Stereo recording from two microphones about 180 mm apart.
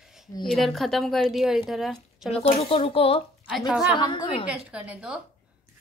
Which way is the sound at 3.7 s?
5° right (ahead or behind).